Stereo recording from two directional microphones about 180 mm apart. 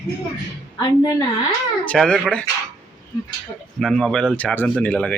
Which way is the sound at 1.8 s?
5° left (ahead or behind).